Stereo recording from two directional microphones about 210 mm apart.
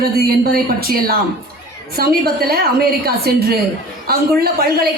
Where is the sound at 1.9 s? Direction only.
45° right (ahead or behind).